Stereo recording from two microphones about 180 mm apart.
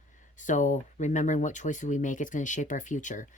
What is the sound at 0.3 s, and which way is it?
Speech, 45° left (ahead or behind).